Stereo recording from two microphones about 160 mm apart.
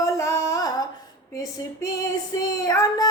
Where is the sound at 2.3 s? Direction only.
20° left (ahead or behind).